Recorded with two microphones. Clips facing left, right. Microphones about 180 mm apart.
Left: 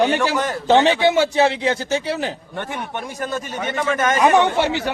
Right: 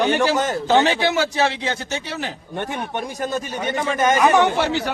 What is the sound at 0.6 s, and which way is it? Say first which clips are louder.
Speech: left 4 dB; 25° left (ahead or behind).